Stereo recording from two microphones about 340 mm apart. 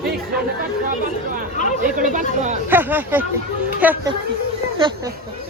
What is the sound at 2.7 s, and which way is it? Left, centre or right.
Speech, centre.